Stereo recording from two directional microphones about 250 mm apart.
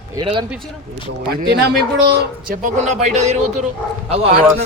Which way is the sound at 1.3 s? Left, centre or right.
Right.